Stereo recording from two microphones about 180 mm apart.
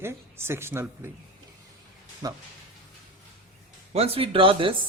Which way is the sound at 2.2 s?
20° right (ahead or behind).